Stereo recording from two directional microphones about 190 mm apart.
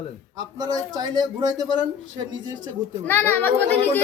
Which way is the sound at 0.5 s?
20° right (ahead or behind).